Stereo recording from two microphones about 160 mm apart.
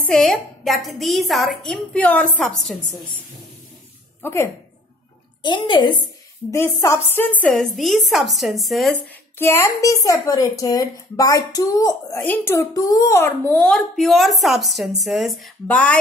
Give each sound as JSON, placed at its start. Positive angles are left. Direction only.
{"t": 0.0, "sound": "a woman's voice", "side_deg": 5}
{"t": 4.2, "sound": "speech", "side_deg": 15}
{"t": 5.4, "sound": "a woman's voice", "side_deg": 30}
{"t": 6.5, "sound": "a woman's voice", "side_deg": 20}
{"t": 9.4, "sound": "a woman's voice", "side_deg": 15}